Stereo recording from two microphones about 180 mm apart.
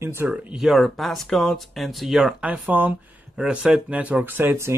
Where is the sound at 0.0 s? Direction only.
15° right (ahead or behind).